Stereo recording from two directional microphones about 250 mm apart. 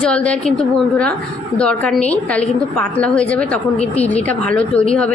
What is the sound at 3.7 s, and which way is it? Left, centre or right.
Speech, left.